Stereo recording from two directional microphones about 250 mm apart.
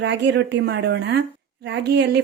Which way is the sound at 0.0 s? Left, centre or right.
Right.